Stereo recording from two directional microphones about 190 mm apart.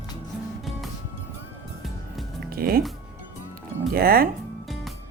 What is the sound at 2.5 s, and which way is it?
Speech, 50° right (ahead or behind).